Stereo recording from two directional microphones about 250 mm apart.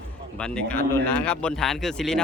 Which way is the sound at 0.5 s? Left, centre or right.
Centre.